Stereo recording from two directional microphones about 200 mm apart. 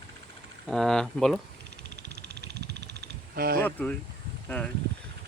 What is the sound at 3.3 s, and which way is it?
Speech, 50° right (ahead or behind).